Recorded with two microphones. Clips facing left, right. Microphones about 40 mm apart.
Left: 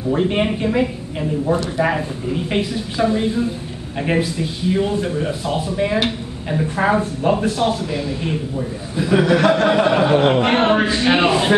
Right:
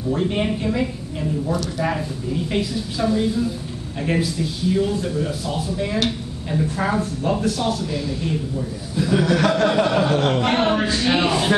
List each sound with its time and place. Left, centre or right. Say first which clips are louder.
0.1 s speech: left 4 dB; left